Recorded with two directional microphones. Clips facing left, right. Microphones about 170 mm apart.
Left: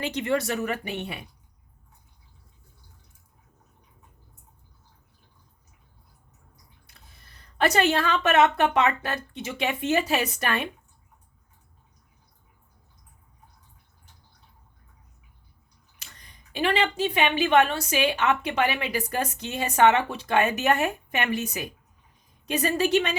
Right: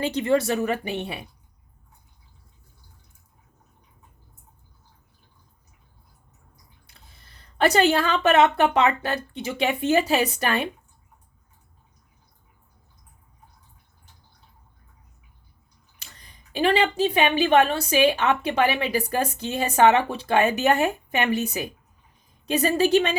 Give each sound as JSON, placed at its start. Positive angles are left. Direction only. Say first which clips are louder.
{"t": 0.0, "sound": "speech", "louder": "right 4 dB", "side_deg": -35}
{"t": 6.8, "sound": "speech", "louder": "right 1 dB", "side_deg": -30}
{"t": 16.0, "sound": "speech", "louder": "right 1 dB", "side_deg": -30}